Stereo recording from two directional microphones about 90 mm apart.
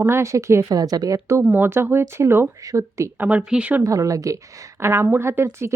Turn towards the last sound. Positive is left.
turn(degrees=-30)  # may be behind; listen again after turning